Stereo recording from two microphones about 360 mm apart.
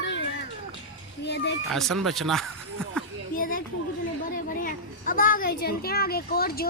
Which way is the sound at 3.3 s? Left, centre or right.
Left.